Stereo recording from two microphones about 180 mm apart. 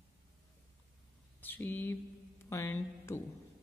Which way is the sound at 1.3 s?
10° left (ahead or behind).